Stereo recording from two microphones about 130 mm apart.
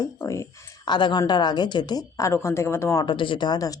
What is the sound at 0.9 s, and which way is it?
Speech, 35° left (ahead or behind).